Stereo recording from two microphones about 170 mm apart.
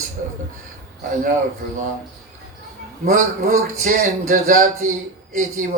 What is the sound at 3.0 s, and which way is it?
Speech, 50° right (ahead or behind).